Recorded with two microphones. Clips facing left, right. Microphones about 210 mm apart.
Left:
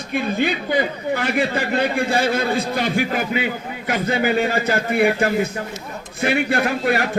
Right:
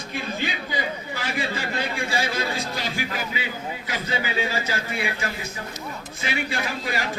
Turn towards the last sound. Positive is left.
turn(degrees=60)  # may be behind; listen again after turning